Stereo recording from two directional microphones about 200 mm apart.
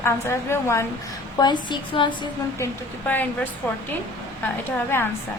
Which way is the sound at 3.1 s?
10° left (ahead or behind).